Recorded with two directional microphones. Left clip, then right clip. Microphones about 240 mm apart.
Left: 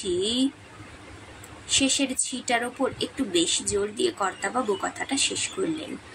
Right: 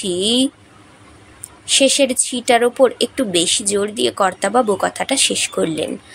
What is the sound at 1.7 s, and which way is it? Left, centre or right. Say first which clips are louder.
A woman's voice: right 11 dB; right.